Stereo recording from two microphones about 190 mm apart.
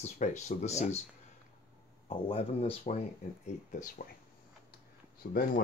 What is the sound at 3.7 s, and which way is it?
Speech, 45° left (ahead or behind).